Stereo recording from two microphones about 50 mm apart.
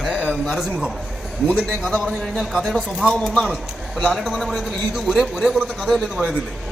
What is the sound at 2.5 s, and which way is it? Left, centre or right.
Speech, centre.